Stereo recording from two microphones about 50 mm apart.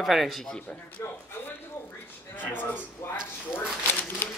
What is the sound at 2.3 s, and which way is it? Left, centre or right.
Speech, left.